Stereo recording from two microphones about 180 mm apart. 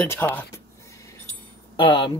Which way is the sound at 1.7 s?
25° left (ahead or behind).